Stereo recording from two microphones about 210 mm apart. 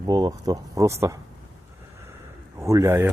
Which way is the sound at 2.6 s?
15° right (ahead or behind).